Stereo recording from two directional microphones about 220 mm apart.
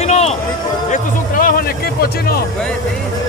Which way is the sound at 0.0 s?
30° left (ahead or behind).